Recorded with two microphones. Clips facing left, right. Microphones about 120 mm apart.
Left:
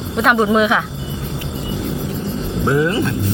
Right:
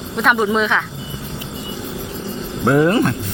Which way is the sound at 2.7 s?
55° right (ahead or behind).